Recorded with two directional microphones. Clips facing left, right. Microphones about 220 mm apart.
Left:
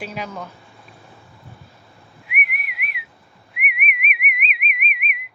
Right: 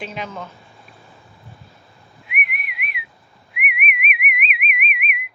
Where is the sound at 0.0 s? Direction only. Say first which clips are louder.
Even; 10° left (ahead or behind).